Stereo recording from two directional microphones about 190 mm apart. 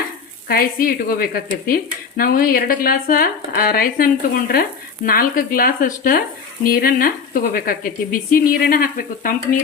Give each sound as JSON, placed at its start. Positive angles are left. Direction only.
{"t": 0.4, "sound": "speech", "side_deg": 50}